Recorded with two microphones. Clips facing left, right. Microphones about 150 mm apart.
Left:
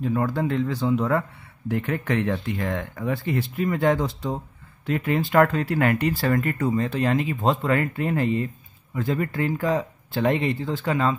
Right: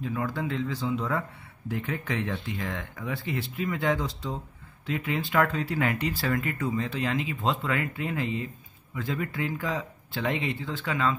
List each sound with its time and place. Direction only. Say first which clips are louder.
0.0 s speech: left 7 dB; 50° left (ahead or behind)